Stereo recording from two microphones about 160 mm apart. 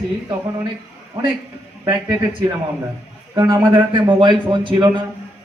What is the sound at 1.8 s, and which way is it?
Speech, 25° right (ahead or behind).